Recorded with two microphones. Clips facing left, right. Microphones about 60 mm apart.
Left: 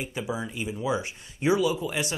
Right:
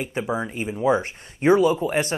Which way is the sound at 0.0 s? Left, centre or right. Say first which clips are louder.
Right 6 dB; right.